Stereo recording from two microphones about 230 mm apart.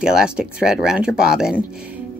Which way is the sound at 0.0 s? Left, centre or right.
Centre.